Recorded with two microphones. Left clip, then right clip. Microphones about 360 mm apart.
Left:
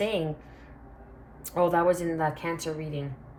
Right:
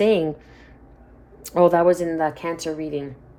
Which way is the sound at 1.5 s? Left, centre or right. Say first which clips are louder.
Right 7 dB; right.